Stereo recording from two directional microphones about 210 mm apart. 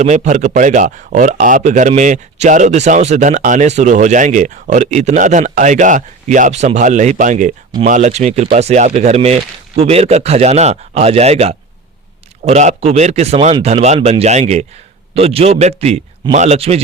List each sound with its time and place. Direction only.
0.0 s a man's voice: 35° right (ahead or behind)